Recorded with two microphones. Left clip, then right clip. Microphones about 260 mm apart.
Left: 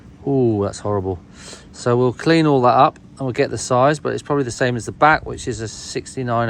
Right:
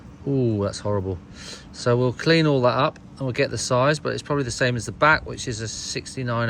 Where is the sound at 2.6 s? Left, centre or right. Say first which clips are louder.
Left 7 dB; left.